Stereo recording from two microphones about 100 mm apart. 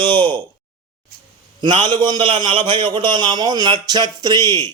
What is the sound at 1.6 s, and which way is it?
A man's voice, 50° right (ahead or behind).